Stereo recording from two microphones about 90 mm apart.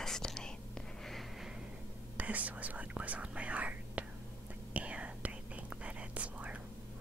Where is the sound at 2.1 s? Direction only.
15° right (ahead or behind).